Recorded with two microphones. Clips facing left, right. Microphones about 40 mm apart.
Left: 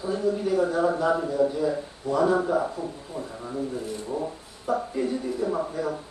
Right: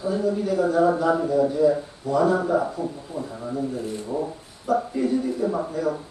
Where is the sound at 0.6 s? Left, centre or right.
Centre.